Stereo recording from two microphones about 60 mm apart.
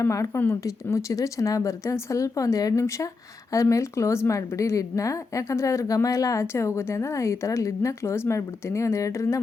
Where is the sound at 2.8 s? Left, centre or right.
Left.